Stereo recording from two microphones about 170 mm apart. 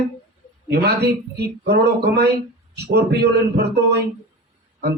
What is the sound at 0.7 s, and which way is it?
A man's voice, 70° right (ahead or behind).